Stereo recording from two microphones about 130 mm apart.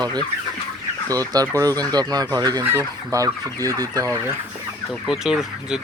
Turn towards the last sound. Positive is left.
turn(degrees=-5)  # may be behind; listen again after turning